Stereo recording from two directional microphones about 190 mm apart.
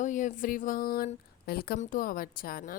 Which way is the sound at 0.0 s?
40° left (ahead or behind).